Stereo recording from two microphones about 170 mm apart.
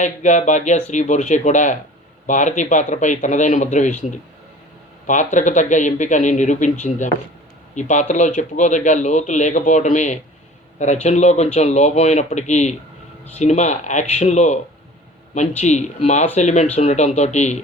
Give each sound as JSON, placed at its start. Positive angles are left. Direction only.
{"t": 0.0, "sound": "a man's voice", "side_deg": 45}